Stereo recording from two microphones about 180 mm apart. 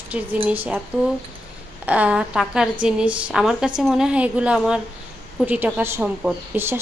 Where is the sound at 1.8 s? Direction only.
10° right (ahead or behind).